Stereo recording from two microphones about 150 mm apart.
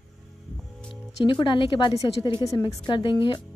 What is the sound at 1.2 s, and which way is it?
A woman's voice, 35° left (ahead or behind).